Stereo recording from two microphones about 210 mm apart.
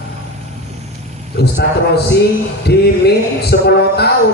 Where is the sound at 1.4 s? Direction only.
50° left (ahead or behind).